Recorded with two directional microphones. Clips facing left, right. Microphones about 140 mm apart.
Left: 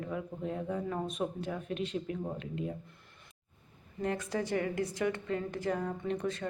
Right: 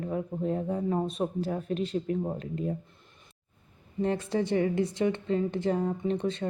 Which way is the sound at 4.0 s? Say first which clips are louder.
Right 6 dB; 30° right (ahead or behind).